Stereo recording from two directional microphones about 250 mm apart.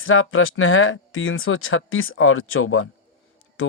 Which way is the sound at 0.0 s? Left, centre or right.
Left.